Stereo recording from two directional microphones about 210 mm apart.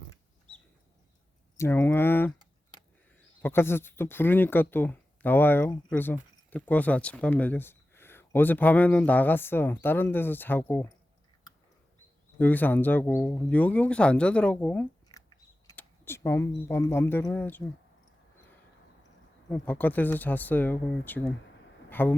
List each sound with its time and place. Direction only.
1.5 s speech: 10° left (ahead or behind)
3.4 s speech: 10° left (ahead or behind)
12.4 s speech: 10° left (ahead or behind)
15.1 s a sound: 20° left (ahead or behind)
15.6 s speech: 10° left (ahead or behind)
19.5 s speech: 5° left (ahead or behind)
21.8 s a sound: 10° left (ahead or behind)